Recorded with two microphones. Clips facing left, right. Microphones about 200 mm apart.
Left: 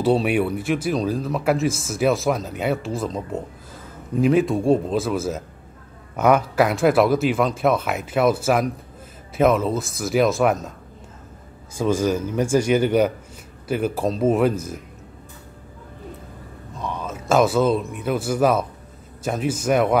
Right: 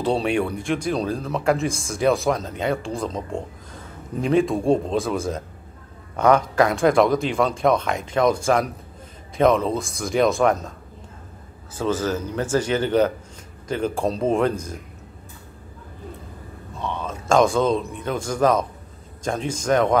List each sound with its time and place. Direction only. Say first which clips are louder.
0.0 s speech: left 2 dB; 5° left (ahead or behind)
11.8 s speech: left 3 dB; 10° left (ahead or behind)
17.0 s speech: even; 5° left (ahead or behind)